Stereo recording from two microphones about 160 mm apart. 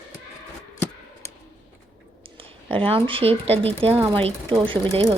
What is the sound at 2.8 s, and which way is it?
Speech, 35° right (ahead or behind).